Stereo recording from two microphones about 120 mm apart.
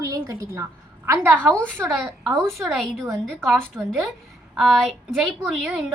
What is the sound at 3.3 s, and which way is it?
A woman's voice, 5° left (ahead or behind).